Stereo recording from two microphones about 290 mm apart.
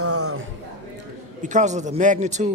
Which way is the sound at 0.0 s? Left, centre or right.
Right.